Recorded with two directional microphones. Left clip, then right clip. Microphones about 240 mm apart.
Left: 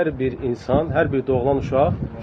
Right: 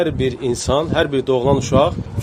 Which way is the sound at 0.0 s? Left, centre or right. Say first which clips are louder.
Right 3 dB; right.